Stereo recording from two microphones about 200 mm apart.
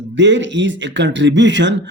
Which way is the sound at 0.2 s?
65° right (ahead or behind).